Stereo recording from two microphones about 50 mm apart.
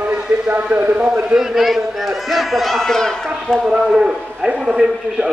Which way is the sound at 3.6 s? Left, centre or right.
Centre.